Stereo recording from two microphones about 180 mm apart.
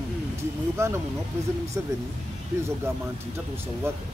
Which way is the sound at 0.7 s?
15° right (ahead or behind).